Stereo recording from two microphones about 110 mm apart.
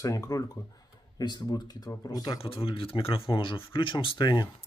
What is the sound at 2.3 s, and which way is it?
Speech, 55° left (ahead or behind).